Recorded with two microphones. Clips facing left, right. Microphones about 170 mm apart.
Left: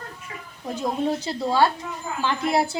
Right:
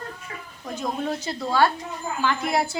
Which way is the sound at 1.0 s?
25° left (ahead or behind).